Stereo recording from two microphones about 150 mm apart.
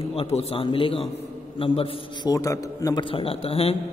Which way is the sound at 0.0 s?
40° left (ahead or behind).